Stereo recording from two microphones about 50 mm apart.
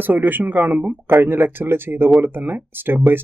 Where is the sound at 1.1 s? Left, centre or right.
Right.